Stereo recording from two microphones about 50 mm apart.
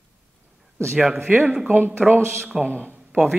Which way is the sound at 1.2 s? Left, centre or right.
Right.